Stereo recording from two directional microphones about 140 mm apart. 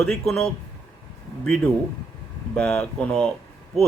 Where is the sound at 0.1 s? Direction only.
5° left (ahead or behind).